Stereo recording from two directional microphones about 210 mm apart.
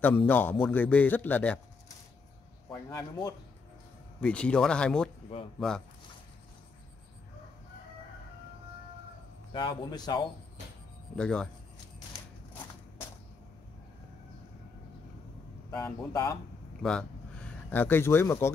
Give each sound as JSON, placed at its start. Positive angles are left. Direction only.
{"t": 0.0, "sound": "a man's voice", "side_deg": 10}
{"t": 2.7, "sound": "a man's voice", "side_deg": 15}
{"t": 4.2, "sound": "speech", "side_deg": 5}
{"t": 9.5, "sound": "a man's voice", "side_deg": 25}
{"t": 11.1, "sound": "speech", "side_deg": 5}
{"t": 15.7, "sound": "a man's voice", "side_deg": 15}
{"t": 16.8, "sound": "speech", "side_deg": 5}